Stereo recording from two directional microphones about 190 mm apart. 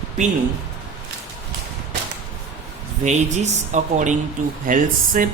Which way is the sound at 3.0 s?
40° right (ahead or behind).